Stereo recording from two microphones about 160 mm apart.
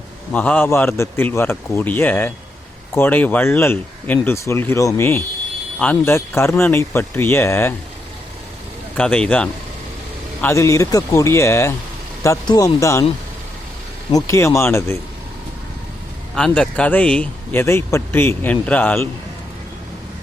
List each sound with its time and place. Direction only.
0.3 s speech: 10° left (ahead or behind)
9.0 s speech: 5° left (ahead or behind)
10.4 s speech: 20° left (ahead or behind)
14.1 s speech: 20° left (ahead or behind)
16.3 s speech: 5° left (ahead or behind)